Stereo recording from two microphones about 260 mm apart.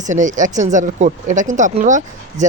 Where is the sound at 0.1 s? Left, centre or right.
Right.